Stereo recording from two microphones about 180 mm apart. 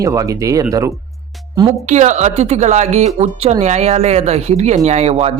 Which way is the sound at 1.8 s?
40° right (ahead or behind).